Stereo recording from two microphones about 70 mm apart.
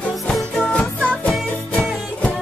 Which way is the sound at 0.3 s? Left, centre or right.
Centre.